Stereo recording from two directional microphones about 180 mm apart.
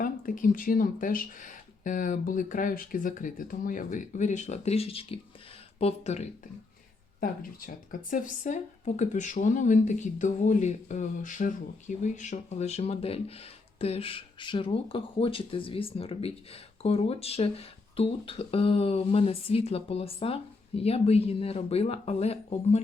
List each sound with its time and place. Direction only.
0.0 s speech: 50° left (ahead or behind)
7.2 s speech: 50° left (ahead or behind)